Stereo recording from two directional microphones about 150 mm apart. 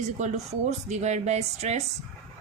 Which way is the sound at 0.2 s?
50° right (ahead or behind).